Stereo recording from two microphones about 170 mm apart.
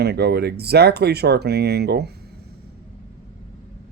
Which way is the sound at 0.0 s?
75° right (ahead or behind).